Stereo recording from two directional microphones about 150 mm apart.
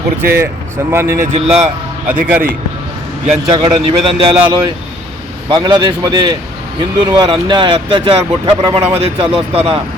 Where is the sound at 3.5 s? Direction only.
35° right (ahead or behind).